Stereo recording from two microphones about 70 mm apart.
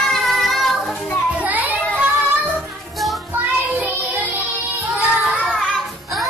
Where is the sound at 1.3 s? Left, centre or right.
Right.